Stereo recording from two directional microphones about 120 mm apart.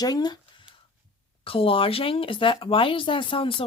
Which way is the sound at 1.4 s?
50° left (ahead or behind).